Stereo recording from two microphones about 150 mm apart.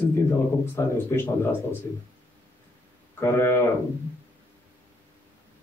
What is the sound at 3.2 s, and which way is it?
Speech, 15° left (ahead or behind).